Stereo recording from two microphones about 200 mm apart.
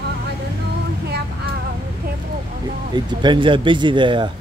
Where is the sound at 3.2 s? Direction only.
25° right (ahead or behind).